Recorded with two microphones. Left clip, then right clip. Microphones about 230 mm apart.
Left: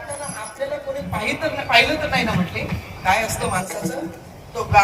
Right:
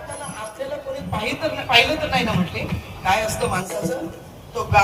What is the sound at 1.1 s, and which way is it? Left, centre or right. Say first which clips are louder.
A woman's voice: left 1 dB; right.